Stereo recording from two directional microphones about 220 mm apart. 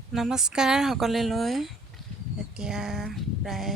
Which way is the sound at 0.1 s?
Centre (ahead or behind).